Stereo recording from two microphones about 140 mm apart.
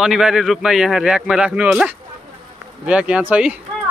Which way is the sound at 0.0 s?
5° right (ahead or behind).